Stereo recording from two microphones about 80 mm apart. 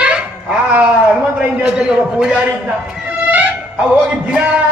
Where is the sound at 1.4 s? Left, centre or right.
Centre.